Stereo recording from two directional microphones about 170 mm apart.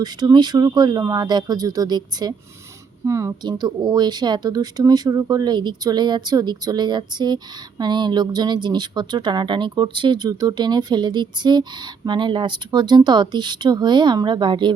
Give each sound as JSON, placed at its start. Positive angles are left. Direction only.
{"t": 0.0, "sound": "speech", "side_deg": -25}